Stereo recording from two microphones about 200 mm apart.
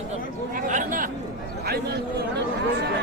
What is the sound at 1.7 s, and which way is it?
Speech, 55° right (ahead or behind).